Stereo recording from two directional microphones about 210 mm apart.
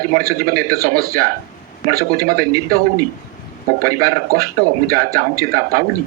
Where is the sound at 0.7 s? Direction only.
45° right (ahead or behind).